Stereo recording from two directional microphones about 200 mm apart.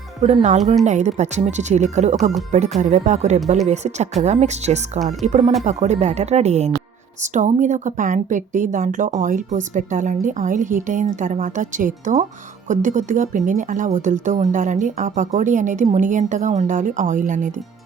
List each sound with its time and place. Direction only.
0.2 s a woman's voice: 35° right (ahead or behind)